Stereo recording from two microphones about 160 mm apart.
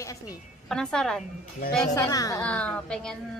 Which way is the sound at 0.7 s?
5° left (ahead or behind).